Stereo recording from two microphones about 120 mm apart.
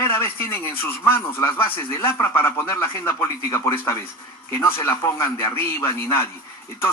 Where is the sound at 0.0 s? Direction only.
20° left (ahead or behind).